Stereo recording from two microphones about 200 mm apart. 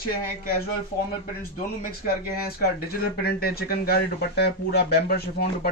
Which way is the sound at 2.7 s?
50° left (ahead or behind).